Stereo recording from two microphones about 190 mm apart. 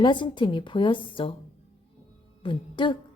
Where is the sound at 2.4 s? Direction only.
25° left (ahead or behind).